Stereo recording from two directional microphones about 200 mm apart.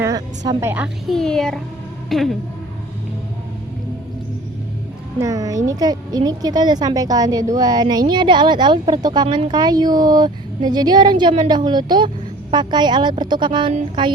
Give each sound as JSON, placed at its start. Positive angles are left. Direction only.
{"t": 0.0, "sound": "a woman's voice", "side_deg": -15}
{"t": 1.0, "sound": "a child's voice", "side_deg": 0}
{"t": 5.2, "sound": "a woman's voice", "side_deg": -15}